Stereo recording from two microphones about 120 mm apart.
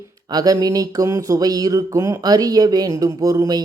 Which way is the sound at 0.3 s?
30° right (ahead or behind).